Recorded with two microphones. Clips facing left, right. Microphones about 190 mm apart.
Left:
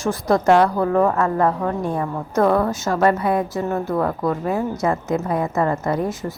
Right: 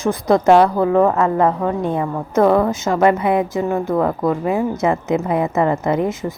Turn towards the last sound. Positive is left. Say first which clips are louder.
# right 3 dB
turn(degrees=-20)  # may be behind; listen again after turning